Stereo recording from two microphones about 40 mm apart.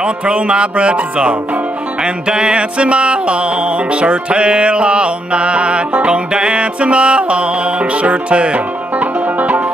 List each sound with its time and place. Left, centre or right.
0.0 s music: right
8.9 s music: right